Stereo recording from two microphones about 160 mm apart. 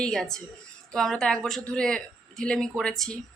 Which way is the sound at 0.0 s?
Centre (ahead or behind).